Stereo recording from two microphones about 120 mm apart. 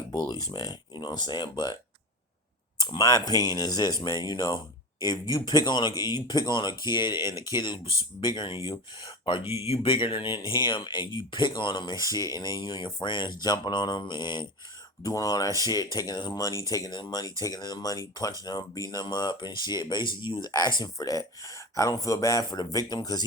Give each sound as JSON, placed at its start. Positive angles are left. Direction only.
{"t": 0.4, "sound": "speech", "side_deg": 35}
{"t": 2.8, "sound": "speech", "side_deg": 35}
{"t": 9.4, "sound": "speech", "side_deg": -20}
{"t": 9.6, "sound": "speech", "side_deg": 50}